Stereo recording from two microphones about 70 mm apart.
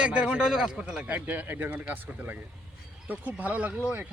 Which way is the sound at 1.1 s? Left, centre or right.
Right.